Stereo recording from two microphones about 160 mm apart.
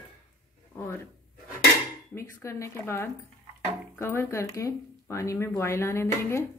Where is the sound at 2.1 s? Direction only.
20° left (ahead or behind).